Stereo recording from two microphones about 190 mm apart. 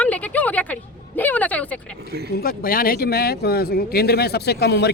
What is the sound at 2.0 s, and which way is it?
Speech, 60° right (ahead or behind).